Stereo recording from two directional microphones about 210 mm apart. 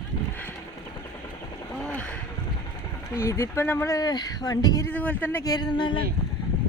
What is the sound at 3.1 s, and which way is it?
Speech, 15° left (ahead or behind).